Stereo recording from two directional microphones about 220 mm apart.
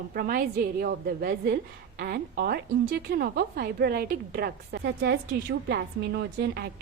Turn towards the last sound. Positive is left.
turn(degrees=-50)  # may be behind; listen again after turning